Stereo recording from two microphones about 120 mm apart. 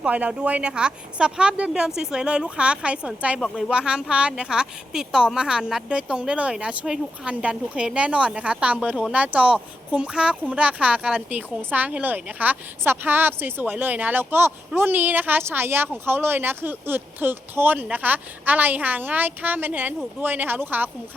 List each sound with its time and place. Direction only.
0.0 s speech: 10° right (ahead or behind)